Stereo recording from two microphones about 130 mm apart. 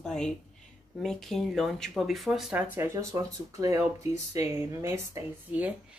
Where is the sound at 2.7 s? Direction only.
20° right (ahead or behind).